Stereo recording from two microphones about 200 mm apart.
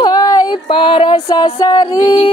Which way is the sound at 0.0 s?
20° left (ahead or behind).